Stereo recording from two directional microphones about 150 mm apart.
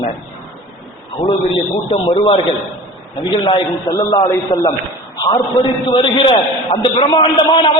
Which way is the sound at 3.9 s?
25° left (ahead or behind).